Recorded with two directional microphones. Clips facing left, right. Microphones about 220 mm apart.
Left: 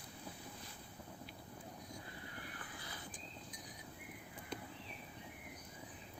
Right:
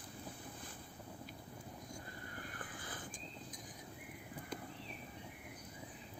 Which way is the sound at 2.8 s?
50° right (ahead or behind).